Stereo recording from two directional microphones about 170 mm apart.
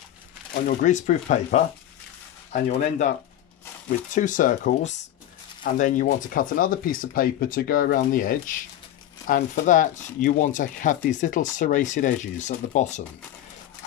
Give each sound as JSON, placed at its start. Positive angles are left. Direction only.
{"t": 0.7, "sound": "speech", "side_deg": 50}
{"t": 4.1, "sound": "speech", "side_deg": 50}